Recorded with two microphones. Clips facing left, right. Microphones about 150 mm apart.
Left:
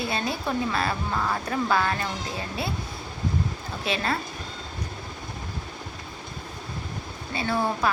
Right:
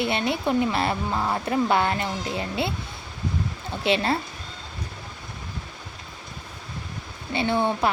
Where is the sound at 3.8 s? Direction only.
25° right (ahead or behind).